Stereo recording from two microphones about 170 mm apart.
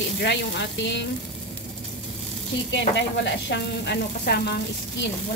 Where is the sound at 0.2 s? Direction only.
90° left.